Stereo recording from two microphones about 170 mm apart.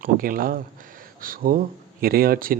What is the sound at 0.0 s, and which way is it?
A man's voice, 55° right (ahead or behind).